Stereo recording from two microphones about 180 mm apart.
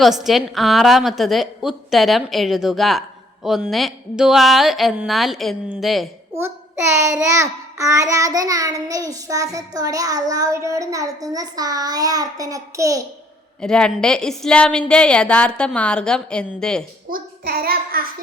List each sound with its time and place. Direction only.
0.0 s a woman's voice: centre (ahead or behind)
6.3 s child singing: 15° right (ahead or behind)
13.6 s a woman's voice: 5° left (ahead or behind)
17.1 s a child's voice: 55° right (ahead or behind)